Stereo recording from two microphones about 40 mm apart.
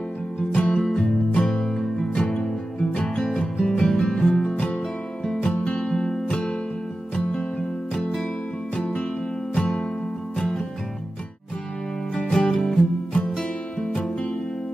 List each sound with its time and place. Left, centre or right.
0.5 s music: left
7.9 s music: centre
10.3 s music: centre
12.2 s music: centre